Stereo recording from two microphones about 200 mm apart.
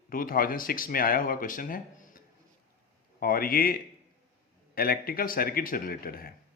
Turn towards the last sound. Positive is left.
turn(degrees=50)  # may be behind; listen again after turning